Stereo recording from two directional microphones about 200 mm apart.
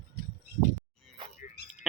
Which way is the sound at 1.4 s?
40° left (ahead or behind).